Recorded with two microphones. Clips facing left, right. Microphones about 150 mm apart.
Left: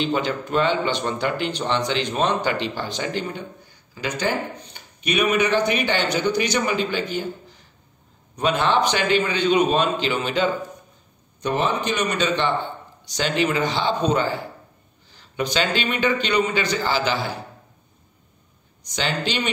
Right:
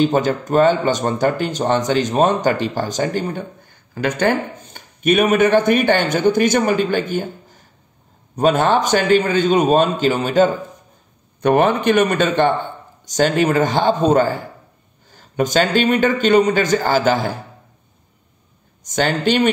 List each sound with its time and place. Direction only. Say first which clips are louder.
0.0 s speech: right 7 dB; 45° right (ahead or behind)
11.4 s speech: right 8 dB; 60° right (ahead or behind)
18.9 s speech: right 8 dB; 50° right (ahead or behind)